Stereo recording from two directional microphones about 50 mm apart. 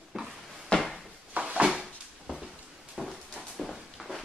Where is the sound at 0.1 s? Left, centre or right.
Centre.